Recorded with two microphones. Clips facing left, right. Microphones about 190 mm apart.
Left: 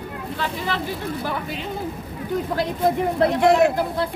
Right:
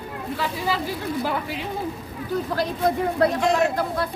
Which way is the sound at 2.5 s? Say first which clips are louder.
Left 2 dB; 20° left (ahead or behind).